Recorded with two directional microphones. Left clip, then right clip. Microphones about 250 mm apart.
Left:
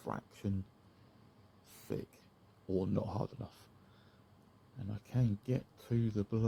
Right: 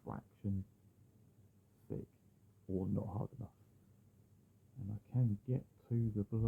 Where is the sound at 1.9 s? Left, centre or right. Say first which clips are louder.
Left 6 dB; left.